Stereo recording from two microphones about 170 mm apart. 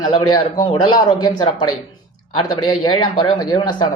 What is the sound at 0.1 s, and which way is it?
Speech, 25° left (ahead or behind).